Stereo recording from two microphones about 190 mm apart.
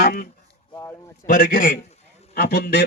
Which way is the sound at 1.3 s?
50° left (ahead or behind).